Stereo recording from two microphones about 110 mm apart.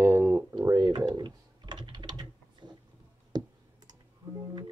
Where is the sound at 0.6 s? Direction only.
35° right (ahead or behind).